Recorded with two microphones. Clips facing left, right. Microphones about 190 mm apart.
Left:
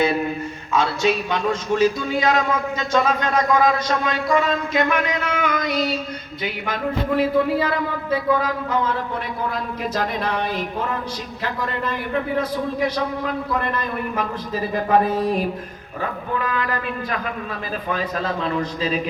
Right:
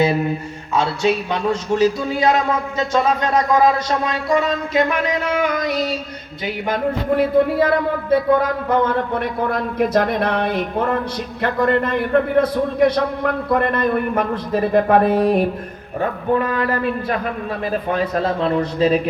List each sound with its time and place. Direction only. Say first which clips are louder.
0.7 s a man's voice: right 2 dB; 35° right (ahead or behind)
7.1 s a man's voice: right 3 dB; 55° right (ahead or behind)
16.0 s speech: right 7 dB; 45° right (ahead or behind)
17.7 s a man's voice: right 5 dB; 55° right (ahead or behind)